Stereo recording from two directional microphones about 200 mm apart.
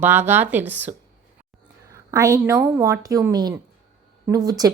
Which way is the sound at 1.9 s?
15° right (ahead or behind).